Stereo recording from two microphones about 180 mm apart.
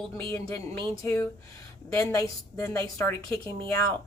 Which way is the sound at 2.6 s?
15° left (ahead or behind).